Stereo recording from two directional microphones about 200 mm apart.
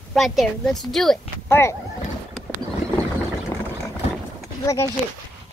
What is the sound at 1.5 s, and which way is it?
Speech, 15° left (ahead or behind).